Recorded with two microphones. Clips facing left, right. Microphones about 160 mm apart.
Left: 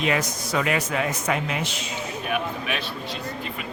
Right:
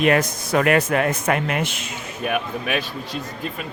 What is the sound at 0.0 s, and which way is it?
Speech, 55° right (ahead or behind).